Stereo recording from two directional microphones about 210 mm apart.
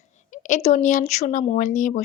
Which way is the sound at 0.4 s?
35° left (ahead or behind).